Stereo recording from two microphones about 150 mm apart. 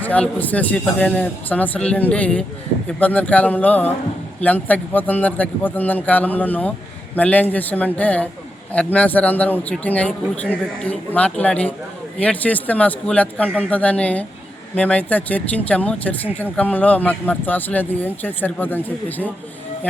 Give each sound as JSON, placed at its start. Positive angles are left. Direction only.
{"t": 0.0, "sound": "speech", "side_deg": 10}